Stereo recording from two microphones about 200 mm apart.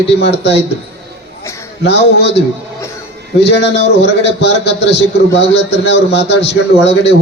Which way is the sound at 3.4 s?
60° left (ahead or behind).